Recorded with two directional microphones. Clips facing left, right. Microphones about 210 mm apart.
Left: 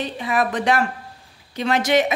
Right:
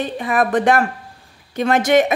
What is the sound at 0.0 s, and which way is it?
Speech, 50° right (ahead or behind).